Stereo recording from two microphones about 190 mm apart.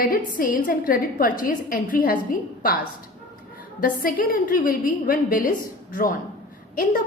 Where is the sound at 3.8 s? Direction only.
45° left (ahead or behind).